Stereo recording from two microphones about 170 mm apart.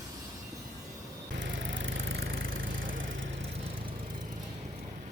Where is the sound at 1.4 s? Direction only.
90° right.